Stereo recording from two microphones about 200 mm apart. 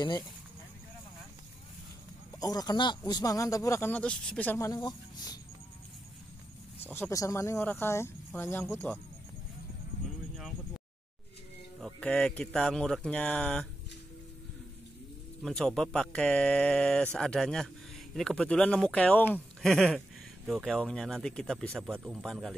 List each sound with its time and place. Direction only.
2.4 s speech: 20° left (ahead or behind)
6.8 s speech: 10° left (ahead or behind)
11.8 s speech: 5° left (ahead or behind)
15.4 s speech: 5° left (ahead or behind)